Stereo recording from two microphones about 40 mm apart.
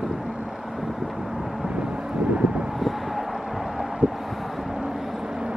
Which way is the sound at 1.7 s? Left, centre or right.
Right.